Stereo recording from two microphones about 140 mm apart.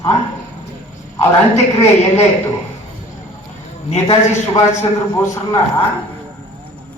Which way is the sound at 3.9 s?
50° left (ahead or behind).